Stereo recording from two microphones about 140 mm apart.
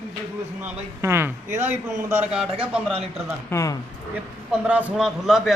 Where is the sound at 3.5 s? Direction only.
20° left (ahead or behind).